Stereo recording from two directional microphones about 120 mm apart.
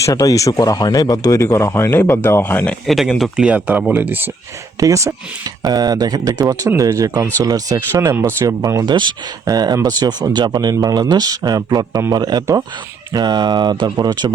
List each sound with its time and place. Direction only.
0.0 s speech: 30° left (ahead or behind); by 2.7 s 15° left (ahead or behind)
2.8 s speech: centre (ahead or behind)
4.8 s speech: 25° right (ahead or behind)